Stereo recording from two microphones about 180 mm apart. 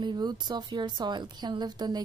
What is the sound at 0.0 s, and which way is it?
A woman's voice, 25° right (ahead or behind).